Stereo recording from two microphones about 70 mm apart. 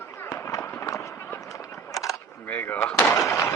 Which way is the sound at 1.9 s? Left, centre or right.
Left.